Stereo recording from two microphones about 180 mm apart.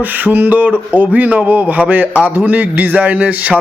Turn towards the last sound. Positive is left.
turn(degrees=-10)  # may be behind; listen again after turning